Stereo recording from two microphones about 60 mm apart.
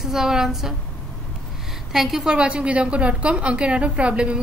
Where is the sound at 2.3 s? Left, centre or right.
Centre.